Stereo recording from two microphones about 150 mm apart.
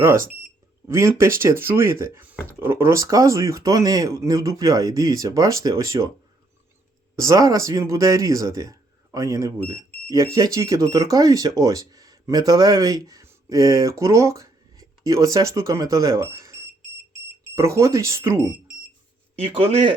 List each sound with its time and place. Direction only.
0.9 s speech: 20° right (ahead or behind)
7.2 s speech: 20° right (ahead or behind)